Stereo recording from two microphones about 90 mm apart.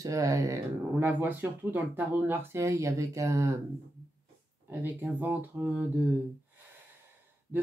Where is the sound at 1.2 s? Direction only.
20° right (ahead or behind); by 3.6 s 35° right (ahead or behind).